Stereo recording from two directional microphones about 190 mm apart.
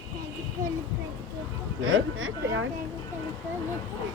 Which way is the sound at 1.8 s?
90° right.